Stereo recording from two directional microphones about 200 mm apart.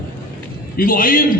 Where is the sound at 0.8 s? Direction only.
45° left (ahead or behind).